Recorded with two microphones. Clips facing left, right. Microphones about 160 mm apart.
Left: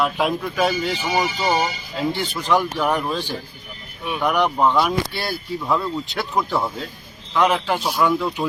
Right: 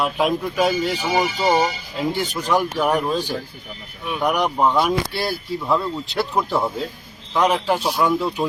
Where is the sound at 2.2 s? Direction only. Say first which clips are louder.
Right 1 dB; 40° right (ahead or behind).